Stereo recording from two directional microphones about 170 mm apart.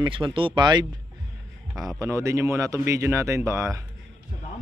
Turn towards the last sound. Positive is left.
turn(degrees=-15)  # may be behind; listen again after turning